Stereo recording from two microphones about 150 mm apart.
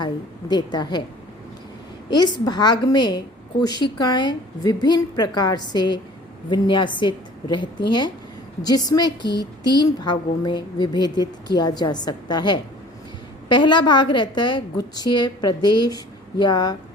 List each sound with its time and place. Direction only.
0.0 s a woman's voice: 30° left (ahead or behind)
2.0 s a woman's voice: 30° left (ahead or behind)